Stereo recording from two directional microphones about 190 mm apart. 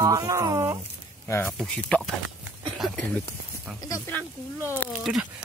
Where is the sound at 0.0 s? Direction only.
15° right (ahead or behind).